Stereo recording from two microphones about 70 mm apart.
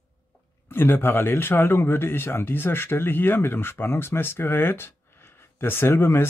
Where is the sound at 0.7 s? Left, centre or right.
Left.